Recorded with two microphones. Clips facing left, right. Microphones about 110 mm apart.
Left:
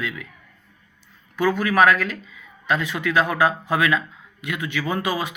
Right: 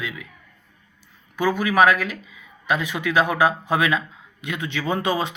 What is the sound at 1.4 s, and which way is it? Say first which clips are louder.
Speech: even; 15° right (ahead or behind).